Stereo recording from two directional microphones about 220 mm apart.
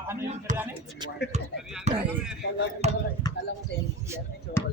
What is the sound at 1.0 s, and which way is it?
Speech, 20° right (ahead or behind).